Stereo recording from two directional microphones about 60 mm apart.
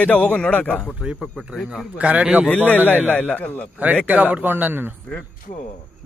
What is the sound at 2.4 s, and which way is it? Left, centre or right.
Speech, left.